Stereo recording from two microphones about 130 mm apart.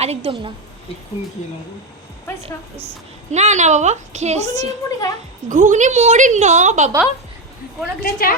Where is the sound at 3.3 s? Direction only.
65° right (ahead or behind).